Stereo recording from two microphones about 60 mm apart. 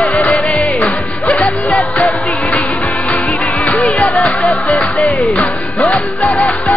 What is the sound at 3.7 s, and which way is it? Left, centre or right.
Music, left.